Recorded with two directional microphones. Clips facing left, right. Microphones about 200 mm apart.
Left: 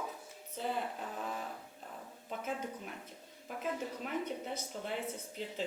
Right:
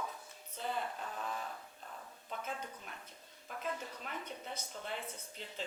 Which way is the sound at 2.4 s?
5° left (ahead or behind).